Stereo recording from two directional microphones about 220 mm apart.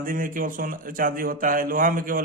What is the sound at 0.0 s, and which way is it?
Speech, 40° right (ahead or behind).